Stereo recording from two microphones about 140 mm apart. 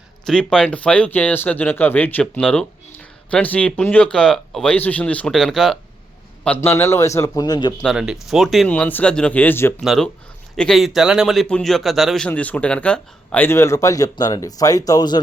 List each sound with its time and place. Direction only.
0.3 s speech: 5° left (ahead or behind)
6.4 s a man's voice: 15° left (ahead or behind)
7.8 s speech: centre (ahead or behind); by 9.7 s 15° left (ahead or behind)
9.8 s speech: centre (ahead or behind); by 15.2 s 30° left (ahead or behind)